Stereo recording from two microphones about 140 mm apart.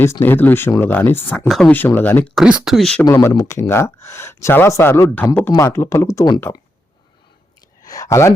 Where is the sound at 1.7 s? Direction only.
15° left (ahead or behind).